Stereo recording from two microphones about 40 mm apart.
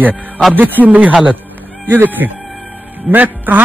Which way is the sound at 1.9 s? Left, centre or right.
Right.